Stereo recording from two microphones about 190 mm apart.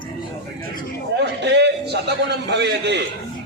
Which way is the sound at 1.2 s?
60° right (ahead or behind).